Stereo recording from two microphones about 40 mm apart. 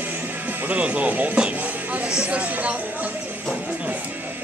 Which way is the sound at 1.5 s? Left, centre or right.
Right.